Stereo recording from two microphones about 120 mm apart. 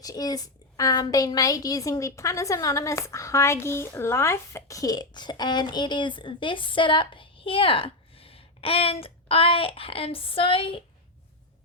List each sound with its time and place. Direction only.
0.0 s a woman's voice: 30° left (ahead or behind); by 10.8 s 50° left (ahead or behind)